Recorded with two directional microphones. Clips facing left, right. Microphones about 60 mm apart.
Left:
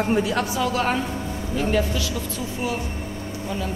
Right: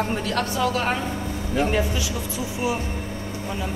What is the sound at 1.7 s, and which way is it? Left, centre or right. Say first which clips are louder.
Speech: left 1 dB; centre.